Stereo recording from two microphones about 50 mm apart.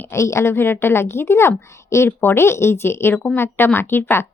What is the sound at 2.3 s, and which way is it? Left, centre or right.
A woman's voice, left.